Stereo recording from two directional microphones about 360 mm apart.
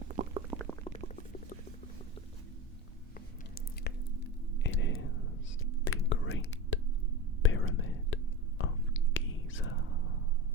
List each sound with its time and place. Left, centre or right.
0.1 s boiling: centre
0.5 s boiling: centre
0.9 s stomach rumble: centre
3.2 s chewing: left
4.6 s whispering: left